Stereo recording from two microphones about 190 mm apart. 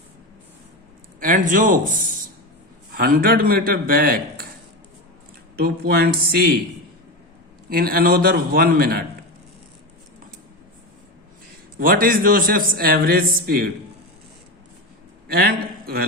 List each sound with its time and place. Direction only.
1.2 s a man's voice: 45° right (ahead or behind)
5.5 s a man's voice: 55° right (ahead or behind)
7.7 s a man's voice: 50° right (ahead or behind)
11.8 s a man's voice: 50° right (ahead or behind)
15.3 s a man's voice: 55° right (ahead or behind)